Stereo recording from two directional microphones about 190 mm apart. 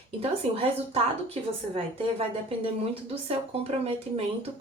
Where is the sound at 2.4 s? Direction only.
30° right (ahead or behind).